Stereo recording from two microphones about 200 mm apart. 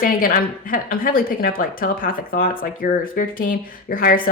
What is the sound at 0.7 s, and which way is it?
A woman's voice, 45° left (ahead or behind).